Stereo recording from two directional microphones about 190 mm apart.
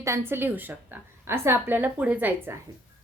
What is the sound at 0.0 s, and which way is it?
A woman's voice, 15° right (ahead or behind).